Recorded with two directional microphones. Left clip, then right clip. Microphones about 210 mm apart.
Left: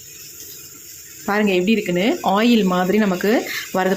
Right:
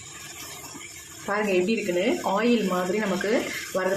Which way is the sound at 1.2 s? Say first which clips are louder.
Left 6 dB; 50° left (ahead or behind).